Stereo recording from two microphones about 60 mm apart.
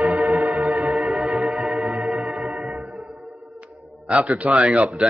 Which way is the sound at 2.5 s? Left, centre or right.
Right.